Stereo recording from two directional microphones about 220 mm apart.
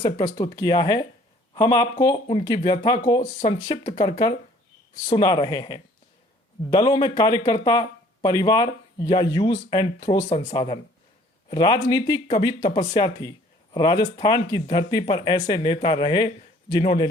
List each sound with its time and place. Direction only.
0.0 s speech: 20° left (ahead or behind)